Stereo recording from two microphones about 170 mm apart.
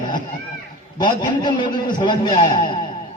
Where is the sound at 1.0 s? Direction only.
25° left (ahead or behind).